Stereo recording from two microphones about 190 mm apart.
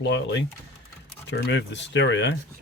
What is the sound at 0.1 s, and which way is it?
Speech, 70° left (ahead or behind).